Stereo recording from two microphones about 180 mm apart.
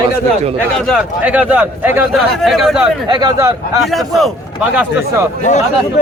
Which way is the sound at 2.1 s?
Centre (ahead or behind).